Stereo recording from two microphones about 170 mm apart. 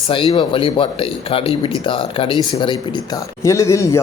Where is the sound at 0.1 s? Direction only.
30° left (ahead or behind).